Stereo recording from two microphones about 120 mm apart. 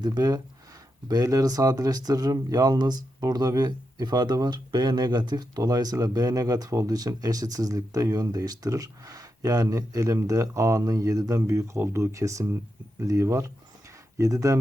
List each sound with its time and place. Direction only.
0.0 s speech: 35° right (ahead or behind)